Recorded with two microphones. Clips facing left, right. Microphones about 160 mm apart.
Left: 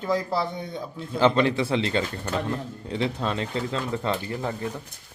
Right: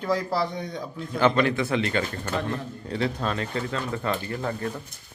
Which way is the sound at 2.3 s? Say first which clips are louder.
Left 1 dB; 15° left (ahead or behind).